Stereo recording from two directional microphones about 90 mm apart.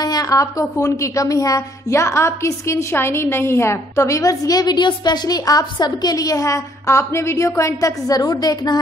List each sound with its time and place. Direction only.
0.0 s a woman's voice: 45° left (ahead or behind)